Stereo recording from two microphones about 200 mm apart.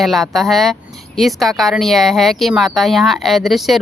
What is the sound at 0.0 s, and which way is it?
A woman's voice, centre (ahead or behind).